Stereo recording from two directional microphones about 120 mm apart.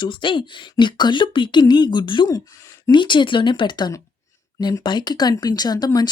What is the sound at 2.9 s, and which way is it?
Speech, 40° left (ahead or behind).